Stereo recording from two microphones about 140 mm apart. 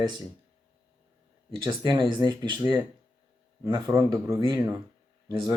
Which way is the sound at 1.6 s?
25° right (ahead or behind).